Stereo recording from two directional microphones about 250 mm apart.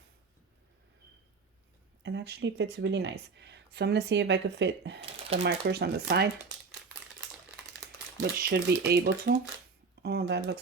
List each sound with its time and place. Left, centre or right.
2.0 s speech: right
8.2 s speech: right